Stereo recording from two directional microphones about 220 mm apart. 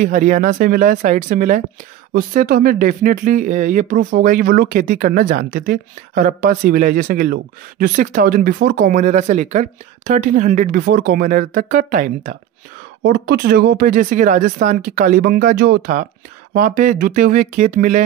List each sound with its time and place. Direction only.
0.0 s speech: 35° right (ahead or behind)
13.0 s speech: 50° right (ahead or behind)